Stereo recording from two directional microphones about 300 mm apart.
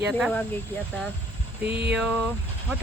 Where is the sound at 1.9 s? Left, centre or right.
Centre.